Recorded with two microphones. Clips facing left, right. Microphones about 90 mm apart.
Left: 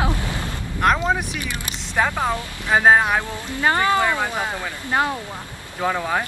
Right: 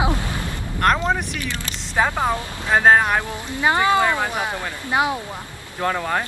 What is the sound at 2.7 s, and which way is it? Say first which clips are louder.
Speech: even; 5° left (ahead or behind).